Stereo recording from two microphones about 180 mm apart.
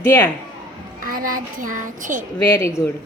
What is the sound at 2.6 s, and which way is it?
Speech, 15° left (ahead or behind).